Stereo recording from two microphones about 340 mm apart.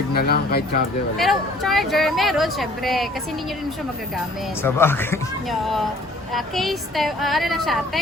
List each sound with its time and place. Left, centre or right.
0.1 s speech: left
1.1 s speech: centre
4.6 s speech: centre